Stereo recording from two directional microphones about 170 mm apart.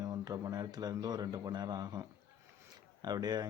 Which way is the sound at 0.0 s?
20° right (ahead or behind).